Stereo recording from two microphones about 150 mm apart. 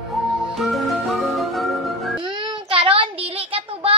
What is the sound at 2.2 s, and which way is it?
Child singing, 30° right (ahead or behind).